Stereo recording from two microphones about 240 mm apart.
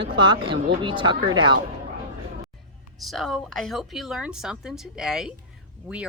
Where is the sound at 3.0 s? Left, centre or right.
Centre.